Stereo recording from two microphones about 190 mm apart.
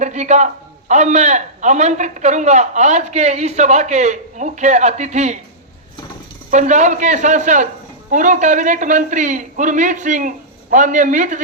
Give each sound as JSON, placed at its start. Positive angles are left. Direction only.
{"t": 0.0, "sound": "a man's voice", "side_deg": -40}
{"t": 6.5, "sound": "a man's voice", "side_deg": -40}